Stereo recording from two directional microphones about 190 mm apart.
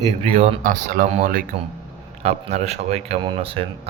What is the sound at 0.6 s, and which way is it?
Speech, 45° right (ahead or behind).